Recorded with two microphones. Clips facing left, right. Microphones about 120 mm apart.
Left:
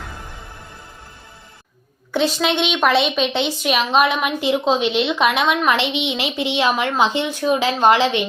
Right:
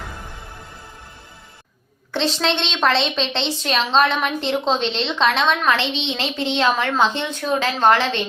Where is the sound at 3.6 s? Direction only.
10° left (ahead or behind).